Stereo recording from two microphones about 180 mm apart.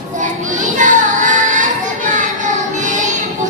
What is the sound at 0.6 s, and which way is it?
Child singing, 45° right (ahead or behind).